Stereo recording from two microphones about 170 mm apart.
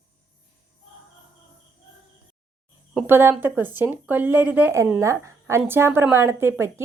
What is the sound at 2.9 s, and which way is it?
Speech, 15° right (ahead or behind).